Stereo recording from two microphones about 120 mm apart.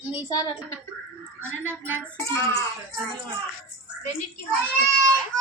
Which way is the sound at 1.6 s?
15° right (ahead or behind).